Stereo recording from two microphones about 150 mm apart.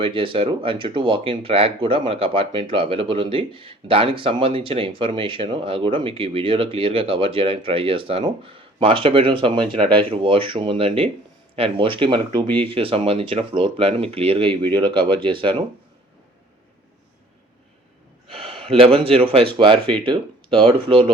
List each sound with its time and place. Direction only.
0.0 s speech: 35° right (ahead or behind)
18.3 s speech: 40° right (ahead or behind)